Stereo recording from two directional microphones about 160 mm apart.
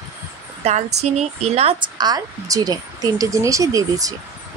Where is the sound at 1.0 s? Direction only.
45° right (ahead or behind).